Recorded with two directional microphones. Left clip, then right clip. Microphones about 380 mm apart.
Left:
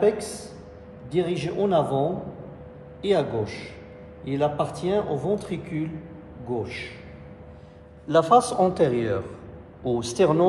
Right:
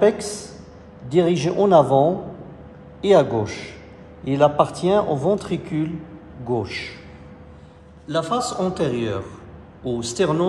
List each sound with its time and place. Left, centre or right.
1.1 s a man's voice: centre
8.1 s a man's voice: centre